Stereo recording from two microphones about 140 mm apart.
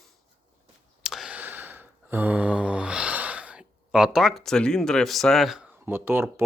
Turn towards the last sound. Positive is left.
turn(degrees=-15)  # may be behind; listen again after turning